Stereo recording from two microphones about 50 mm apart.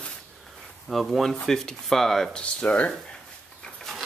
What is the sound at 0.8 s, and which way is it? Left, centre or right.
Speech, centre.